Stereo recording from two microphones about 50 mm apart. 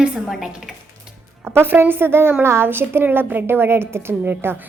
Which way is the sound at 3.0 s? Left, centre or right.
Right.